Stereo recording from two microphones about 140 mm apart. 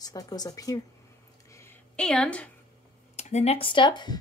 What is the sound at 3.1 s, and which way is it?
Speech, 50° left (ahead or behind).